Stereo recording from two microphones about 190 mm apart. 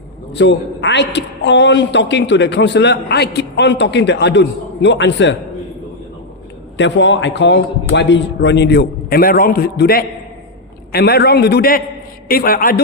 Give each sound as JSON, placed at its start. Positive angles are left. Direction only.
{"t": 0.3, "sound": "a woman's voice", "side_deg": 65}
{"t": 6.7, "sound": "a man's voice", "side_deg": 70}